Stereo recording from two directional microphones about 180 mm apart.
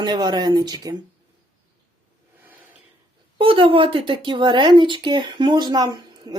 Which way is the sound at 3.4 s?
30° right (ahead or behind).